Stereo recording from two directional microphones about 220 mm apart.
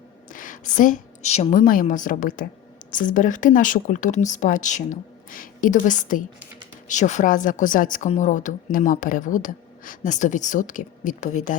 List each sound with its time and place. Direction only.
0.3 s a woman's voice: 35° left (ahead or behind)